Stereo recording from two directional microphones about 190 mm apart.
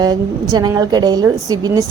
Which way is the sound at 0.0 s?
20° right (ahead or behind).